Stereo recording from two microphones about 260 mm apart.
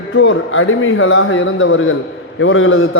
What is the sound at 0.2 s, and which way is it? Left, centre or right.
A man's voice, left.